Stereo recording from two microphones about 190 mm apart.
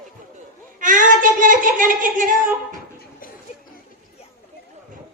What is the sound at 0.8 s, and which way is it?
Speech, 45° right (ahead or behind).